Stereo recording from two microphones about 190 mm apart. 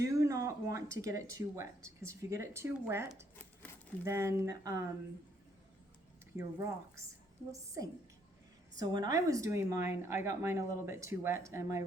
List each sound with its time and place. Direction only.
0.0 s speech: 15° right (ahead or behind)
6.3 s speech: 15° right (ahead or behind)